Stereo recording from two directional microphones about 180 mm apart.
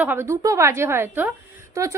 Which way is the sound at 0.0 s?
10° right (ahead or behind).